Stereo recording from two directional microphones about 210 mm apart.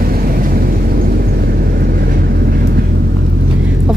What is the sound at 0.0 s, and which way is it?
Vehicle, 45° right (ahead or behind).